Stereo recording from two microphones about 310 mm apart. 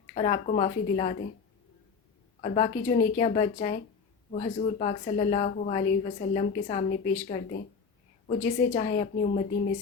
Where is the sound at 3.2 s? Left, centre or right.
Left.